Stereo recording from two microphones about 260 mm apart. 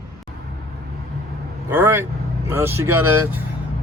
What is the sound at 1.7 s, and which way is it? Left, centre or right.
Speech, centre.